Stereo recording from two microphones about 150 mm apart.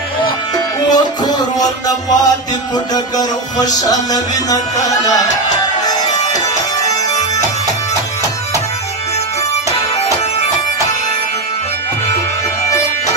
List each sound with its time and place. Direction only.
0.3 s music: 25° left (ahead or behind)